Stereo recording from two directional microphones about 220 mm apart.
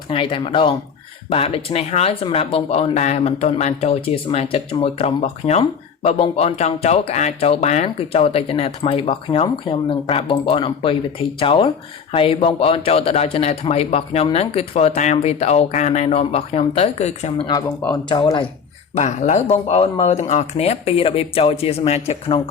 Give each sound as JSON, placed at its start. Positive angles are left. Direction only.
{"t": 0.1, "sound": "speech", "side_deg": 25}
{"t": 18.9, "sound": "speech", "side_deg": 35}